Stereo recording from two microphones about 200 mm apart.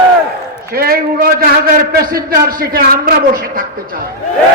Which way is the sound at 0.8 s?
50° right (ahead or behind).